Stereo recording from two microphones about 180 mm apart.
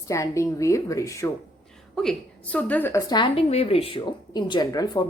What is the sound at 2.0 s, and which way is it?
A woman's voice, 5° left (ahead or behind).